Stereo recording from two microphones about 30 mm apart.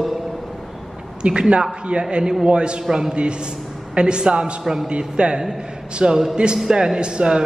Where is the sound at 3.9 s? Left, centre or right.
Right.